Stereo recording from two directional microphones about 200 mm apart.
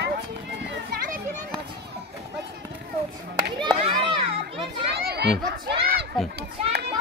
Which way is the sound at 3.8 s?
25° right (ahead or behind).